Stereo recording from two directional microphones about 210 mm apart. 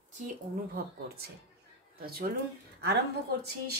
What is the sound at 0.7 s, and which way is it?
A woman's voice, 50° right (ahead or behind).